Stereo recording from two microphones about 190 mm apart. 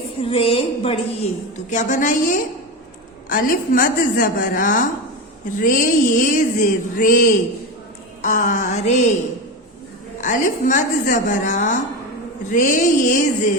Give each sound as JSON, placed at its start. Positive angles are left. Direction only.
{"t": 0.2, "sound": "a woman's voice", "side_deg": 30}
{"t": 1.7, "sound": "a woman's voice", "side_deg": 40}
{"t": 8.2, "sound": "a woman's voice", "side_deg": 40}
{"t": 10.2, "sound": "a woman's voice", "side_deg": 40}